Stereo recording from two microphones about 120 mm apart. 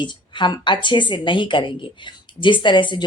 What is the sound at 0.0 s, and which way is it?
A woman's voice, 40° left (ahead or behind).